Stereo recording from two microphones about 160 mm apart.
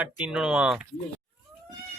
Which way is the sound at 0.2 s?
5° right (ahead or behind).